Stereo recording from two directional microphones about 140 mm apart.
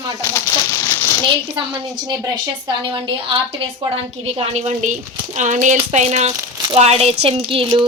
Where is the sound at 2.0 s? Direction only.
30° right (ahead or behind).